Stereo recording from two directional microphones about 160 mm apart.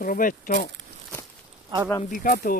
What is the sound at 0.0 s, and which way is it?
Speech, 60° left (ahead or behind).